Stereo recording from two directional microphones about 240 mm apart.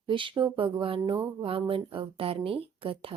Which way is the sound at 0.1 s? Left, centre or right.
Right.